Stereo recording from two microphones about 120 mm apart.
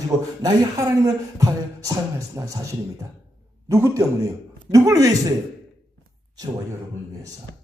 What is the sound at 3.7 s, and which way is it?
Speech, 25° right (ahead or behind).